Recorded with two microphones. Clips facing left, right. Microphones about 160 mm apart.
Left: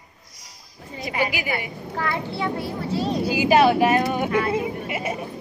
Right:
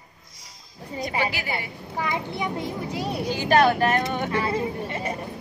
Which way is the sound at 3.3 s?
10° left (ahead or behind).